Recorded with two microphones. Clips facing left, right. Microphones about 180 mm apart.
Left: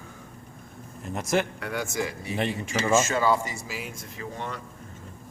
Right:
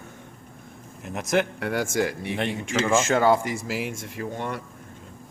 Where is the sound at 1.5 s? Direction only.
70° right (ahead or behind).